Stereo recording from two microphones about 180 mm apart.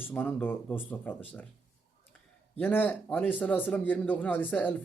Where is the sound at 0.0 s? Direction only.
10° left (ahead or behind).